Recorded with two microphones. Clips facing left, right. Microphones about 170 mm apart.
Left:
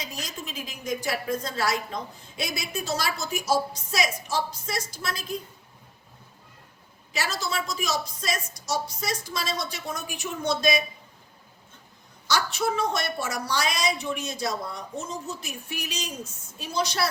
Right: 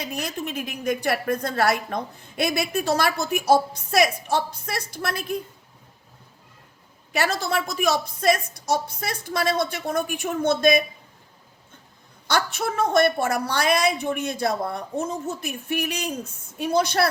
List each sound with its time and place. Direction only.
0.0 s a woman's voice: 60° right (ahead or behind)
7.1 s a woman's voice: 55° right (ahead or behind)
12.3 s a woman's voice: 55° right (ahead or behind)